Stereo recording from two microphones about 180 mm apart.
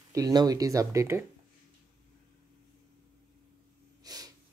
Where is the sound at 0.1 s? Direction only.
20° right (ahead or behind).